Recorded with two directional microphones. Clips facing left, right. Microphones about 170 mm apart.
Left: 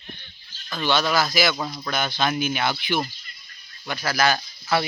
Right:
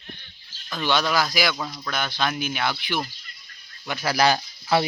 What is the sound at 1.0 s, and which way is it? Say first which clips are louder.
Speech: left 1 dB; centre (ahead or behind).